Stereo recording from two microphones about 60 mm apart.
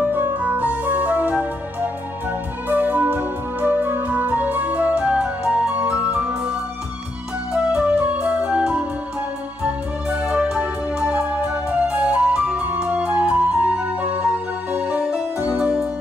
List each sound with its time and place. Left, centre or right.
0.0 s music: right
2.7 s music: right; by 6.5 s centre
7.5 s music: centre